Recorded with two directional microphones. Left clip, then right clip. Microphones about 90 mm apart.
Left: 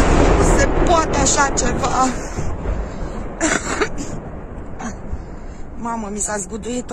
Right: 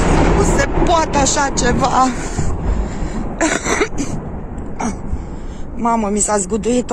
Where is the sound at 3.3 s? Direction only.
40° right (ahead or behind).